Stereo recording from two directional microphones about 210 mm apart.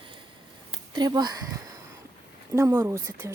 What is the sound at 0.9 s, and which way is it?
Speech, 20° right (ahead or behind).